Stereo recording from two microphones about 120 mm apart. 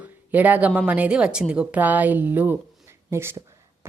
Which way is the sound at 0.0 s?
15° right (ahead or behind).